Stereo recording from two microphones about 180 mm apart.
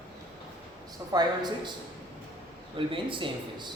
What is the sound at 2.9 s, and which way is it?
Speech, 30° right (ahead or behind).